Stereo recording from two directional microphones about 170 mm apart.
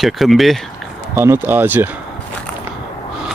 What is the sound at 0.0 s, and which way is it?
Speech, centre (ahead or behind).